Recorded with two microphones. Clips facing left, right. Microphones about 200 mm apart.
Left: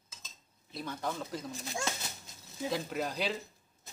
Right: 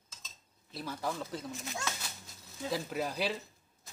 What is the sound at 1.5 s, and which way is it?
Speech, 35° left (ahead or behind).